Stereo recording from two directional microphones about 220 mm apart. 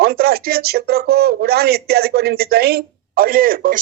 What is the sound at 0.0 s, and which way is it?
Speech, 45° right (ahead or behind).